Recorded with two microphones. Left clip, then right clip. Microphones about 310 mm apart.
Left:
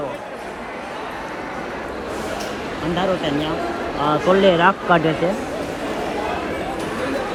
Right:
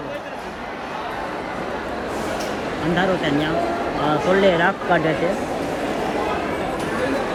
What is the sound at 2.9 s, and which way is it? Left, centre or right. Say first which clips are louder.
Speech: even; centre.